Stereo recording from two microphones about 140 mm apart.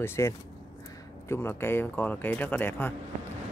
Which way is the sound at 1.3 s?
15° left (ahead or behind).